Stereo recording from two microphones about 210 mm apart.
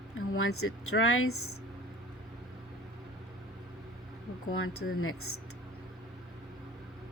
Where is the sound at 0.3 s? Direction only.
85° left.